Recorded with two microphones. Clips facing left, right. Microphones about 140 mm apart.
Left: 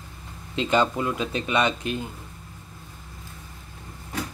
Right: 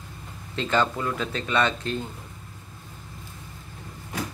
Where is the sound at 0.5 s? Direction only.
15° left (ahead or behind).